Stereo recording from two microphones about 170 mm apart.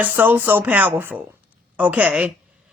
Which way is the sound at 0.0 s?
10° right (ahead or behind).